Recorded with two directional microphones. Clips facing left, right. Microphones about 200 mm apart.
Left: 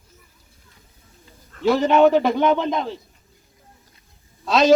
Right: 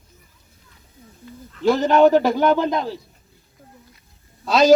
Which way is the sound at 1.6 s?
Centre (ahead or behind).